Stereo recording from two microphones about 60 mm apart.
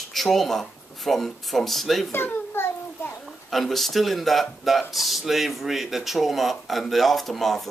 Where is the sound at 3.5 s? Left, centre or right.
Centre.